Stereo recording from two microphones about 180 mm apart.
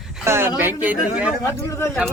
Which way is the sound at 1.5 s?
15° left (ahead or behind).